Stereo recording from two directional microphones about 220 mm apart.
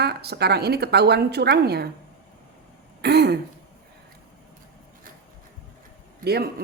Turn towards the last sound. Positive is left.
turn(degrees=-45)  # may be behind; listen again after turning